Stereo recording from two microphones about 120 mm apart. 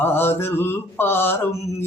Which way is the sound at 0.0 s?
20° left (ahead or behind).